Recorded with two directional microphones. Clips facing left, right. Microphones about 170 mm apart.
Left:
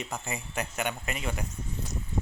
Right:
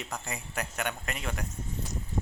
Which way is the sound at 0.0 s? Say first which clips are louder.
Left 2 dB; centre (ahead or behind).